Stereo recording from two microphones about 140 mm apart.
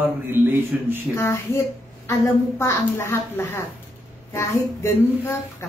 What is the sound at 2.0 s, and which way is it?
A woman's voice, 20° left (ahead or behind).